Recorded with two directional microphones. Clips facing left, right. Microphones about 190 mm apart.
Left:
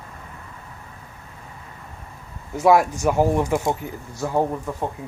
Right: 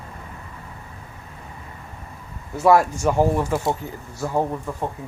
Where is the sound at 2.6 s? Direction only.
10° left (ahead or behind).